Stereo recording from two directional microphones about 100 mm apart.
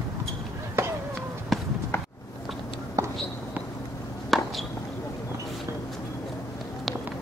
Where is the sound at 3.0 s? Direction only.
35° right (ahead or behind).